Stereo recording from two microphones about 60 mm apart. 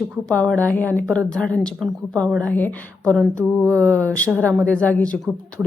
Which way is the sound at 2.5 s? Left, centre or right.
Left.